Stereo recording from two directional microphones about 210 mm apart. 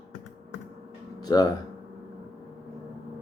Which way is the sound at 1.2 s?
20° left (ahead or behind).